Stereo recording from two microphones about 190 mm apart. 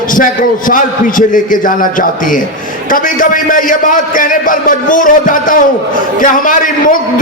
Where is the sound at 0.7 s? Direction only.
45° left (ahead or behind).